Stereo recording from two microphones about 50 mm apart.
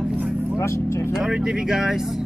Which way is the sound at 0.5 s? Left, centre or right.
Left.